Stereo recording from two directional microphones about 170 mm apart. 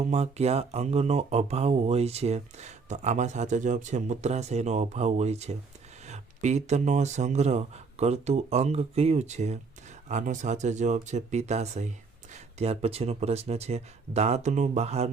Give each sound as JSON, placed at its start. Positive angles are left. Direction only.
{"t": 0.0, "sound": "speech", "side_deg": -40}